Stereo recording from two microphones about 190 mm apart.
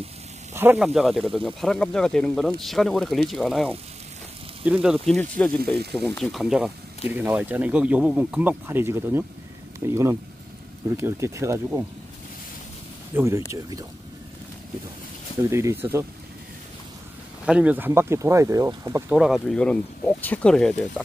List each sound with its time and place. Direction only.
0.6 s speech: 10° right (ahead or behind)
0.8 s speech: centre (ahead or behind)
13.1 s speech: 15° right (ahead or behind)
15.5 s speech: 15° right (ahead or behind)
17.5 s speech: 5° right (ahead or behind)
19.1 s speech: centre (ahead or behind)